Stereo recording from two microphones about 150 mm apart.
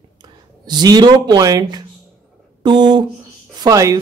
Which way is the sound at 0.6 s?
30° right (ahead or behind).